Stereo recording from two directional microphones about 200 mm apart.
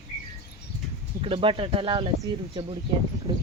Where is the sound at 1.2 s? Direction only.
30° right (ahead or behind).